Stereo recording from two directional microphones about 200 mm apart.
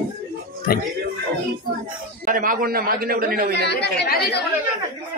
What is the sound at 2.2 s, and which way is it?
A man's voice, 45° right (ahead or behind).